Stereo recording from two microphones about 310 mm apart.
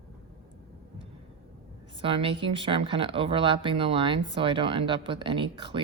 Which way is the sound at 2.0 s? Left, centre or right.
Centre.